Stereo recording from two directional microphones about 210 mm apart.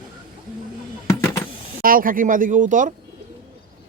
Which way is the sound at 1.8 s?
40° right (ahead or behind).